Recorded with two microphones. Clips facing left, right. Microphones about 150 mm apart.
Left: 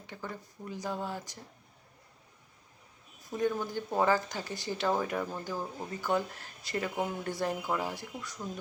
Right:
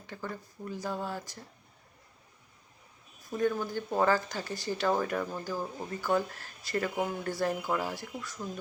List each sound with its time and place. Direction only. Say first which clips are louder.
0.1 s speech: right 2 dB; 20° left (ahead or behind)
3.2 s speech: right 1 dB; 20° left (ahead or behind)